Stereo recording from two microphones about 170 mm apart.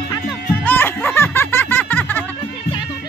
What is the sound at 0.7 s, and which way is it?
Music, 10° left (ahead or behind).